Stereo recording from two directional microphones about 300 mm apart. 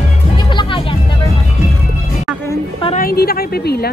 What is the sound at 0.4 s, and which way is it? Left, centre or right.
Music, centre.